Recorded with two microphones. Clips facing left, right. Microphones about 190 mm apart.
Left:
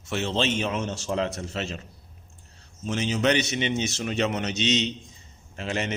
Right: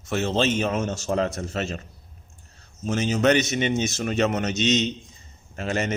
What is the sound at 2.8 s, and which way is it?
A man's voice, 45° right (ahead or behind).